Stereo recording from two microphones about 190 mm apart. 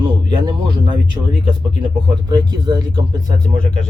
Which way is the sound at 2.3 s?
25° right (ahead or behind).